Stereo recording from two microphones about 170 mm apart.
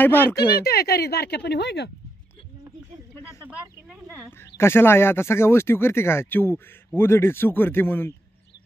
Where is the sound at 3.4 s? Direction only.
15° right (ahead or behind).